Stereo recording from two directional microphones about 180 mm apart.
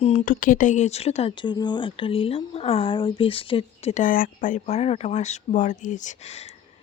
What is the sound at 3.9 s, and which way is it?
Speech, 50° left (ahead or behind).